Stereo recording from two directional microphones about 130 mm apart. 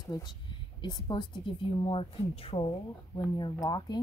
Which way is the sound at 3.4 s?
30° left (ahead or behind).